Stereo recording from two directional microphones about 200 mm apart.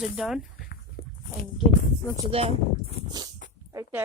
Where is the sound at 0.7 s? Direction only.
50° left (ahead or behind).